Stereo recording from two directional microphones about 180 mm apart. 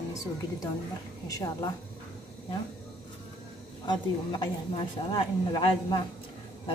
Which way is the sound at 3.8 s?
25° left (ahead or behind).